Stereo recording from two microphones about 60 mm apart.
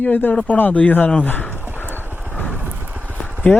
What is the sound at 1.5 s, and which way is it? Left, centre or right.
Clip-clop, right.